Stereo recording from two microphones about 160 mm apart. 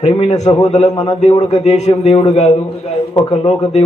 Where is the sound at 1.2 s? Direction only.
45° left (ahead or behind).